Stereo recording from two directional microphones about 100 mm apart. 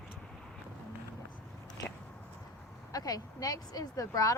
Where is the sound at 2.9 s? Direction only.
40° left (ahead or behind).